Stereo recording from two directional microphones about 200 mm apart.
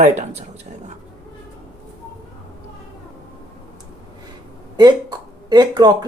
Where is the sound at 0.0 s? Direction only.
35° right (ahead or behind).